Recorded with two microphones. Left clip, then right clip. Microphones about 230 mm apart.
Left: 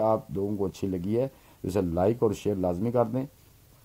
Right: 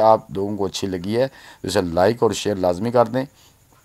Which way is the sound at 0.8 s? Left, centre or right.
Right.